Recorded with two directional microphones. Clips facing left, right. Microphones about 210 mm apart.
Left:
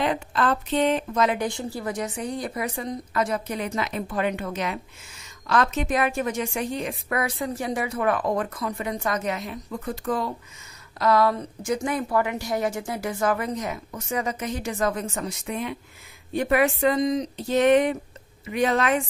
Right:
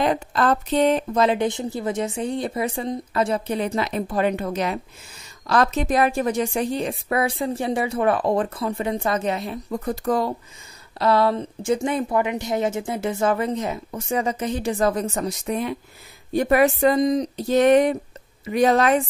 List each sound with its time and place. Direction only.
0.0 s a woman's voice: 40° right (ahead or behind)
11.0 s a woman's voice: 30° right (ahead or behind)